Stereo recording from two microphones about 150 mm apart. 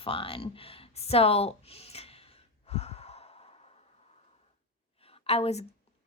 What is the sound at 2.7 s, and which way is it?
Sigh, 45° left (ahead or behind).